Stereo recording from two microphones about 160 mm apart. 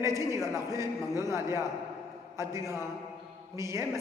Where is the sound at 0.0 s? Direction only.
20° right (ahead or behind).